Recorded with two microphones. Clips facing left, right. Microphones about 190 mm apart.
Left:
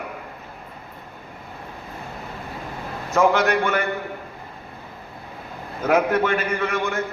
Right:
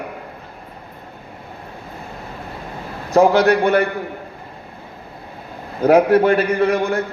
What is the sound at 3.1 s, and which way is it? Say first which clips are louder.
Speech: right 6 dB; 35° right (ahead or behind).